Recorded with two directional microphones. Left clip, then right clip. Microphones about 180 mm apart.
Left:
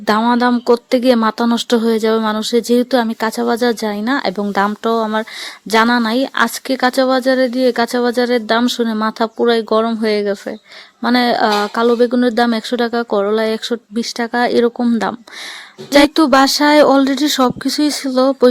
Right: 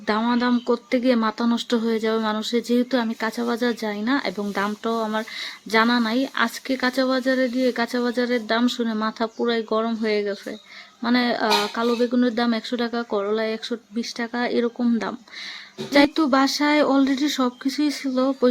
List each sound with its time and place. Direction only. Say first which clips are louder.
0.0 s speech: left 9 dB; 45° left (ahead or behind)